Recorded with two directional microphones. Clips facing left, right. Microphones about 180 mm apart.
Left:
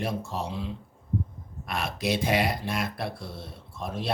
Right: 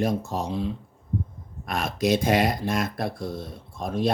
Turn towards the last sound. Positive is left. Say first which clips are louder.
# right 7 dB
turn(degrees=-45)  # may be behind; listen again after turning